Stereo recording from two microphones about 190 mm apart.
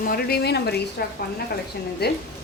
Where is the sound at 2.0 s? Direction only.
60° left (ahead or behind).